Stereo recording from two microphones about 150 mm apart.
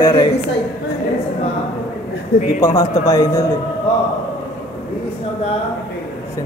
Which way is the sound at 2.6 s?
25° left (ahead or behind).